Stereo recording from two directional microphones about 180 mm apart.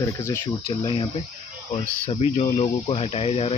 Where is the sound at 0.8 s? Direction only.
30° left (ahead or behind).